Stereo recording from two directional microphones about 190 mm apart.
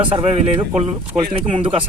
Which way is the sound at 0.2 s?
35° right (ahead or behind).